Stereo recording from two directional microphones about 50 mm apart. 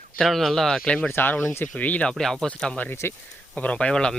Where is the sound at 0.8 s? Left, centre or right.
Left.